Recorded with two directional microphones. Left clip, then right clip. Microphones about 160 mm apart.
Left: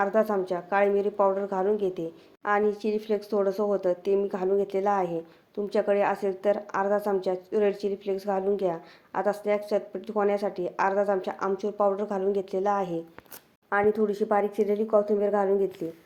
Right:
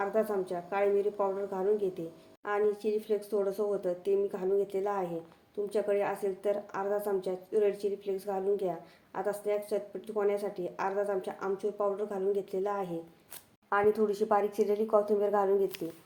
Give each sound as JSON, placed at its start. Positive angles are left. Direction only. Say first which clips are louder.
{"t": 0.0, "sound": "a woman's voice", "louder": "left 6 dB", "side_deg": 30}